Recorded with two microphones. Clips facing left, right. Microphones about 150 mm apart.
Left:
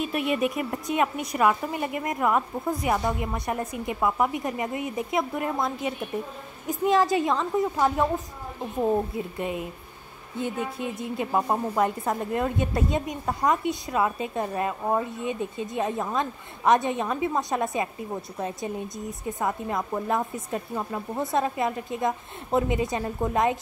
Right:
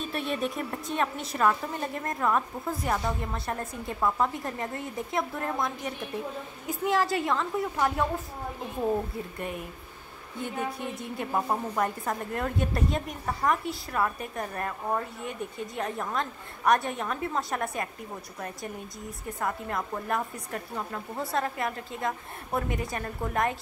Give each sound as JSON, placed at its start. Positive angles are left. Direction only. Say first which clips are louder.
{"t": 0.0, "sound": "a woman's voice", "louder": "left 5 dB", "side_deg": 10}
{"t": 9.4, "sound": "speech", "louder": "left 5 dB", "side_deg": 20}